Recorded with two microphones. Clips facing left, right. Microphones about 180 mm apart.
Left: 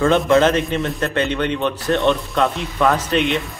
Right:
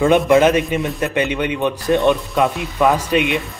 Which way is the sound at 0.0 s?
15° right (ahead or behind).